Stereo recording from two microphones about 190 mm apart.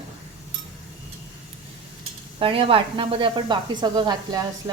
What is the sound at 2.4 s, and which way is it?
Speech, 30° right (ahead or behind).